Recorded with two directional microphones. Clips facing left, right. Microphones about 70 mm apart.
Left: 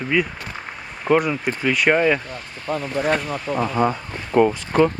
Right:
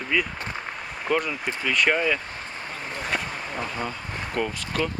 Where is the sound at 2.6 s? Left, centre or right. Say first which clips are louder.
Left 11 dB; left.